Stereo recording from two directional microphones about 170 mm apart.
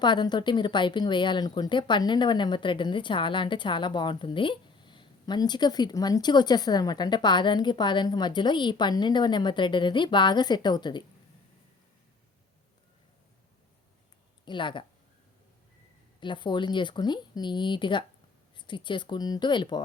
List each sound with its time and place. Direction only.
0.0 s speech: 25° left (ahead or behind)
14.4 s speech: 30° left (ahead or behind)
16.2 s speech: 30° left (ahead or behind)